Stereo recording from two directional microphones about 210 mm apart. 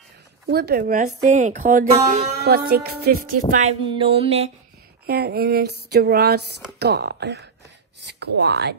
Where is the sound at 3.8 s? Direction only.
25° right (ahead or behind).